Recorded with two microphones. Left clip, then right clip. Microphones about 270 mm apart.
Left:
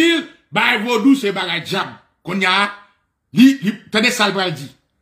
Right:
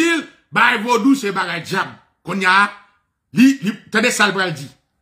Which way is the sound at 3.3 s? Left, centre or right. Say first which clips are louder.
Left 1 dB; centre.